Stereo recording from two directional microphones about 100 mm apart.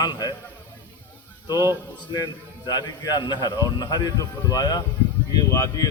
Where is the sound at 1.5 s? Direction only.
30° right (ahead or behind).